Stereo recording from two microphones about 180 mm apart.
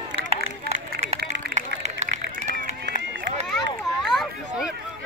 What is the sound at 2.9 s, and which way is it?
Run, 80° right.